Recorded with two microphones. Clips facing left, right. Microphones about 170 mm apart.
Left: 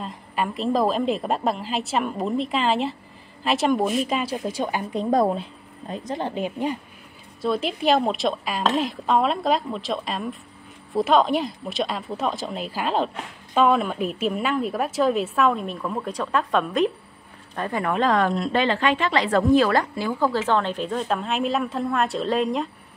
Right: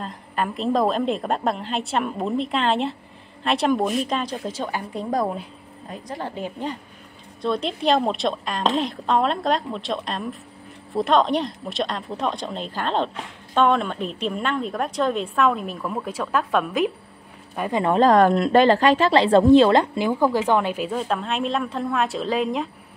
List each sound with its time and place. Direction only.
0.0 s a woman's voice: centre (ahead or behind)
7.4 s speech: 5° left (ahead or behind)
17.6 s speech: 20° right (ahead or behind)
17.9 s a woman's voice: 40° right (ahead or behind); by 22.7 s centre (ahead or behind)